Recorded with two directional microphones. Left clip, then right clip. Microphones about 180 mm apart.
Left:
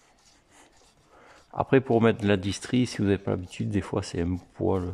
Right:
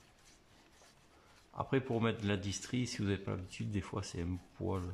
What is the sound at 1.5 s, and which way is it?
Speech, 50° left (ahead or behind).